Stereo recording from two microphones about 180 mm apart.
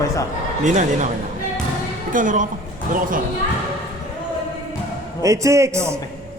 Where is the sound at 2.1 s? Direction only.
45° right (ahead or behind).